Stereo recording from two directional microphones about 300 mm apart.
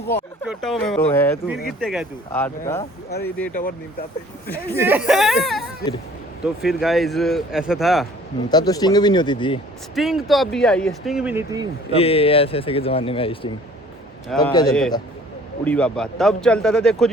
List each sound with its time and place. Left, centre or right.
0.1 s speech: centre
3.5 s a man's voice: left
4.8 s speech: centre
8.4 s speech: centre
9.9 s speech: centre
11.9 s a man's voice: centre
14.7 s speech: centre